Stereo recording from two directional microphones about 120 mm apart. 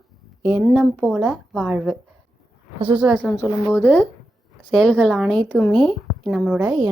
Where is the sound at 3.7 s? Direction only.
20° left (ahead or behind).